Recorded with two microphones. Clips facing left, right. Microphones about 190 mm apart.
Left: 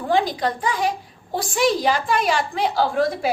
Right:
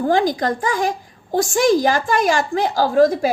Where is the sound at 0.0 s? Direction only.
45° right (ahead or behind).